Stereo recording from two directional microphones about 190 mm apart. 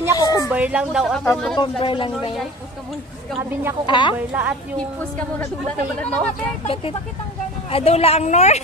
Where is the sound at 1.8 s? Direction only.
25° left (ahead or behind).